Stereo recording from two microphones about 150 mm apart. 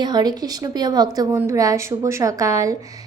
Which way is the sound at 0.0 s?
25° right (ahead or behind).